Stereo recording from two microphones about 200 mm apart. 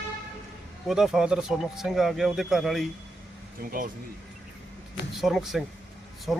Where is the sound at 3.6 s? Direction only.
45° right (ahead or behind).